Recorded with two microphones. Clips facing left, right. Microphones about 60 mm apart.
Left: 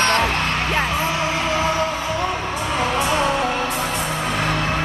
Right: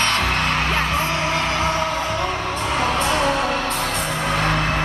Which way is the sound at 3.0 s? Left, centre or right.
Centre.